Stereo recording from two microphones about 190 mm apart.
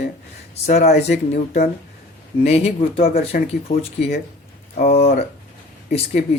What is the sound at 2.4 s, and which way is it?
Speech, 35° left (ahead or behind).